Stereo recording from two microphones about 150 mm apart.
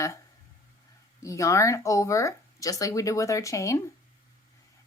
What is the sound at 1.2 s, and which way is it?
Speech, 20° left (ahead or behind).